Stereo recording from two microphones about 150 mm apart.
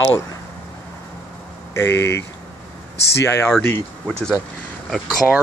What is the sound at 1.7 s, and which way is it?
Speech, 15° left (ahead or behind).